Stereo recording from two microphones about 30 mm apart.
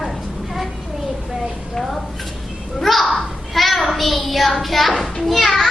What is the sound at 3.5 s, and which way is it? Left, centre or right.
Child singing, centre.